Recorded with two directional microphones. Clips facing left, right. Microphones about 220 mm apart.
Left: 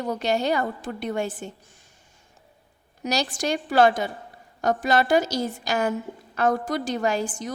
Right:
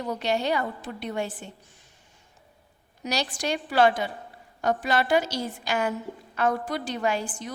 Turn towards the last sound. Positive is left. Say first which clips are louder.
# left 3 dB
turn(degrees=45)  # may be behind; listen again after turning